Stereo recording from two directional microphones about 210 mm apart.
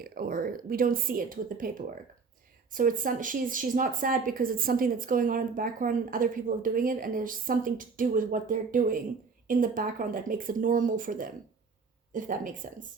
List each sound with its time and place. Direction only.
0.0 s a woman's voice: 45° right (ahead or behind)
2.7 s a woman's voice: 40° right (ahead or behind)